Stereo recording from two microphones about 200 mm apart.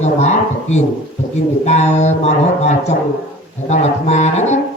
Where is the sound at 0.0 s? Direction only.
35° left (ahead or behind).